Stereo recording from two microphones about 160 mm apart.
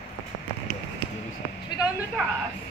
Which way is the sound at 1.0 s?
35° right (ahead or behind).